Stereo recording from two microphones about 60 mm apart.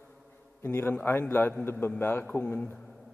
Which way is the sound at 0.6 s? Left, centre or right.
Left.